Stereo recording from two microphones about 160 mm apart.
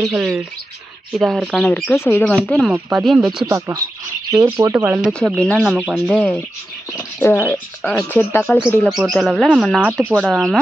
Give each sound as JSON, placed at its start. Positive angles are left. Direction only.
{"t": 0.0, "sound": "speech", "side_deg": 0}
{"t": 2.3, "sound": "speech", "side_deg": 0}
{"t": 3.4, "sound": "speech", "side_deg": -20}
{"t": 8.8, "sound": "speech", "side_deg": 0}